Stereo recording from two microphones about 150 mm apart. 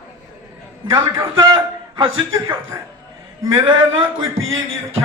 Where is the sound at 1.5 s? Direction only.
30° right (ahead or behind).